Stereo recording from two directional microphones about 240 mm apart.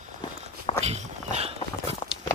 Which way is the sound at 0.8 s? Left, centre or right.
Right.